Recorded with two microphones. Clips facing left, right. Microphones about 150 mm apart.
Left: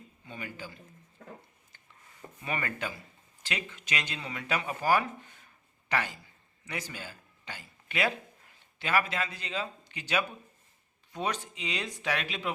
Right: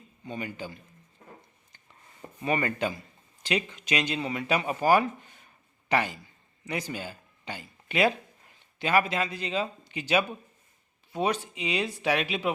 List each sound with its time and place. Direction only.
0.3 s speech: 20° right (ahead or behind)
2.4 s speech: 25° right (ahead or behind)